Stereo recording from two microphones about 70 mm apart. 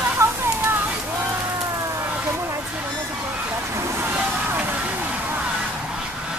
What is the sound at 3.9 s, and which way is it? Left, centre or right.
Vehicle, right.